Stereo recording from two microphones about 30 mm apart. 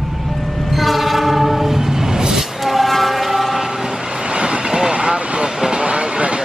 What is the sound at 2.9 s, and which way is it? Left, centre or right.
Vehicle, centre.